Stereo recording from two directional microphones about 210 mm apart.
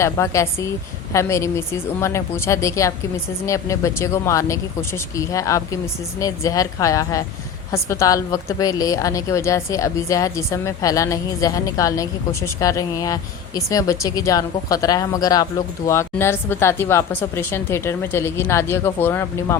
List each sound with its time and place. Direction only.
0.0 s a woman's voice: 15° left (ahead or behind)